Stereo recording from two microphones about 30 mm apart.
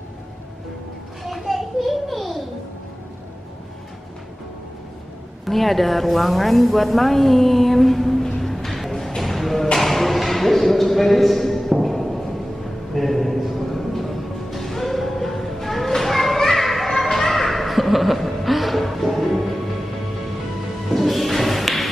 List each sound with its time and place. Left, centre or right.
1.2 s children playing: centre
5.4 s a woman's voice: centre
8.4 s music: centre
9.8 s a sound: centre
12.9 s music: centre
16.0 s children playing: centre
17.0 s chuckle: centre
20.9 s music: centre